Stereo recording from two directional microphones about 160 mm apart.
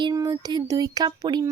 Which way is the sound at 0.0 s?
25° right (ahead or behind).